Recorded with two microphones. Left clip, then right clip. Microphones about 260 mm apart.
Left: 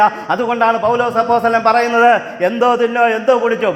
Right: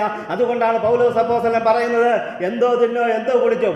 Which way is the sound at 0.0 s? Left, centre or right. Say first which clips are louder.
Left 6 dB; left.